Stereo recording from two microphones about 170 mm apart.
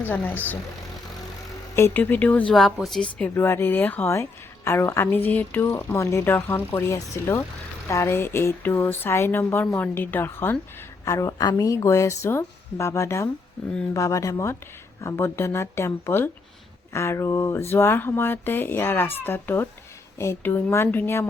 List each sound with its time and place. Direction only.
0.0 s speech: 10° left (ahead or behind)
1.7 s speech: 10° left (ahead or behind)